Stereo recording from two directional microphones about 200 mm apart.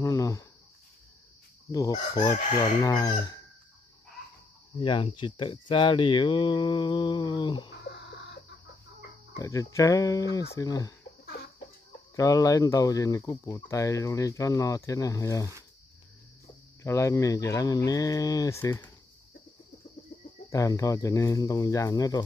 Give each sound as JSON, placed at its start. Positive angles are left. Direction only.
{"t": 0.0, "sound": "cricket", "side_deg": 15}
{"t": 1.7, "sound": "speech", "side_deg": 20}
{"t": 4.7, "sound": "speech", "side_deg": 25}
{"t": 8.1, "sound": "chicken", "side_deg": 60}
{"t": 9.4, "sound": "speech", "side_deg": 15}
{"t": 12.2, "sound": "speech", "side_deg": 15}
{"t": 16.8, "sound": "speech", "side_deg": 15}
{"t": 20.4, "sound": "speech", "side_deg": 15}